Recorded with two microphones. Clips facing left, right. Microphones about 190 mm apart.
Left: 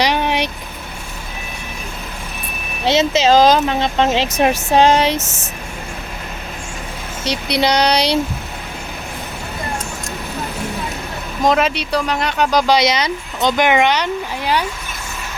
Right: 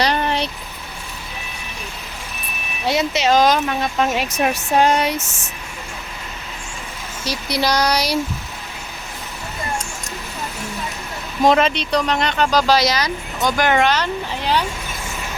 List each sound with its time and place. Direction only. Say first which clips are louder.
0.0 s vehicle: left 2 dB; 15° left (ahead or behind)
2.8 s speech: left 4 dB; 25° left (ahead or behind)
7.3 s speech: left 4 dB; 65° left (ahead or behind)
7.8 s speech: left 3 dB; 30° left (ahead or behind)
11.4 s speech: right 1 dB; 5° left (ahead or behind)